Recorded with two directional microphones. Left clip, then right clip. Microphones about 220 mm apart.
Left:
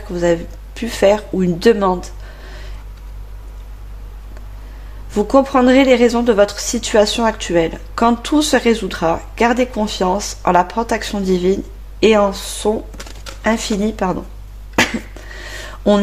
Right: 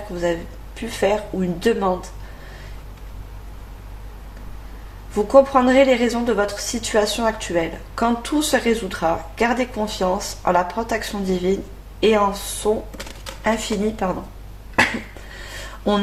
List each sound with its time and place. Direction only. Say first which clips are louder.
0.2 s speech: left 7 dB; 40° left (ahead or behind)
5.1 s a woman's voice: left 1 dB; 40° left (ahead or behind)